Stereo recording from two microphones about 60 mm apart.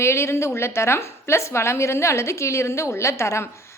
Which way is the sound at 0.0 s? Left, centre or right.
Left.